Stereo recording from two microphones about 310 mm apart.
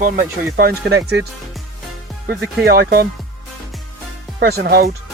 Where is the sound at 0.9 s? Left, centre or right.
Right.